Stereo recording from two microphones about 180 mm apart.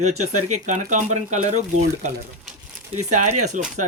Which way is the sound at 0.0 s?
40° right (ahead or behind).